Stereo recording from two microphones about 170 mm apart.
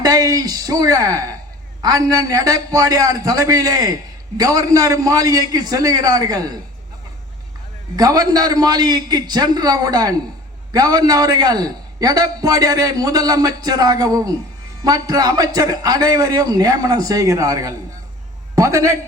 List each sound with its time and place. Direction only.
0.0 s a man's voice: 20° right (ahead or behind)
7.9 s a man's voice: 20° right (ahead or behind)